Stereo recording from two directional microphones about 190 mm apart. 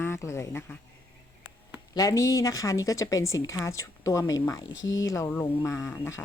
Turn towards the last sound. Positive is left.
turn(degrees=15)  # may be behind; listen again after turning